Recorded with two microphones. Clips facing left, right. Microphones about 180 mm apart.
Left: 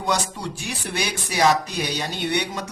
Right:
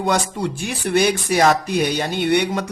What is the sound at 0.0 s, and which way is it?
Speech, 55° right (ahead or behind).